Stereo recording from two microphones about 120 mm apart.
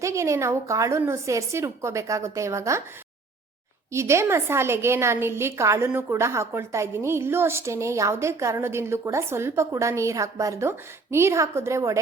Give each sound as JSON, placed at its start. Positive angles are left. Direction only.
{"t": 0.0, "sound": "a woman's voice", "side_deg": -25}
{"t": 3.9, "sound": "a woman's voice", "side_deg": -25}